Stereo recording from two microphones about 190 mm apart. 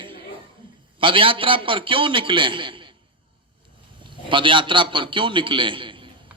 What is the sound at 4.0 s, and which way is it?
A man's voice, 25° right (ahead or behind).